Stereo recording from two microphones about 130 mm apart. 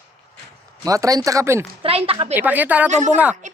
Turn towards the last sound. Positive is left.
turn(degrees=-65)  # may be behind; listen again after turning